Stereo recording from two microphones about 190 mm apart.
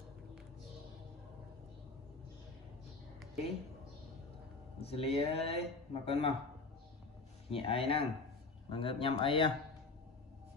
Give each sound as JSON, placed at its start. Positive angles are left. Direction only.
{"t": 4.8, "sound": "speech", "side_deg": 30}
{"t": 7.4, "sound": "speech", "side_deg": 30}